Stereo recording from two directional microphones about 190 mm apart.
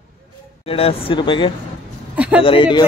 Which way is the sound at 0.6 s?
30° left (ahead or behind).